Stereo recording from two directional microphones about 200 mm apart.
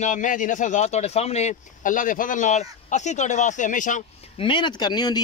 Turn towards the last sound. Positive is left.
turn(degrees=20)  # may be behind; listen again after turning